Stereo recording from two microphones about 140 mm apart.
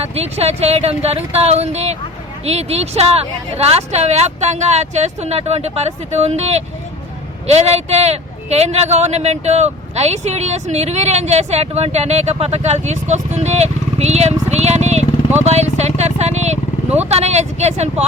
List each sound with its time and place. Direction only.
0.1 s a man's voice: 45° right (ahead or behind)